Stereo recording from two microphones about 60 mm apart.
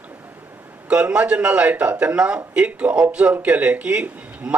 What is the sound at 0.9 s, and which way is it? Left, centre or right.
Speech, centre.